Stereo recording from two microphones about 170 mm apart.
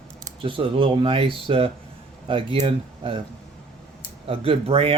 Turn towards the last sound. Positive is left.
turn(degrees=-35)  # may be behind; listen again after turning